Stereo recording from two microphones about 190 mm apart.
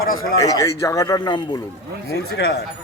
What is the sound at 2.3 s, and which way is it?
Speech, 60° left (ahead or behind).